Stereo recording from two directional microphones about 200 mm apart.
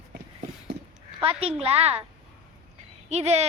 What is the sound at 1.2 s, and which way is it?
Speech, 25° right (ahead or behind).